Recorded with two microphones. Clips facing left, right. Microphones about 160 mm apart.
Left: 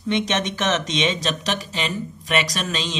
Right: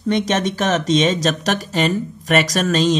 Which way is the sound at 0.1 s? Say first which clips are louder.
Right 4 dB; 35° right (ahead or behind).